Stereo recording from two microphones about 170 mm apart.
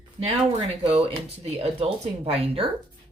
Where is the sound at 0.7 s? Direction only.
35° right (ahead or behind).